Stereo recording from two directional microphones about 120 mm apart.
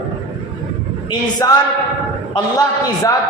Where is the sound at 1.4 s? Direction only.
25° left (ahead or behind).